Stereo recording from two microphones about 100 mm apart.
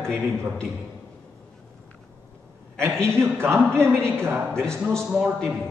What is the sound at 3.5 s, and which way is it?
Speech, 25° right (ahead or behind).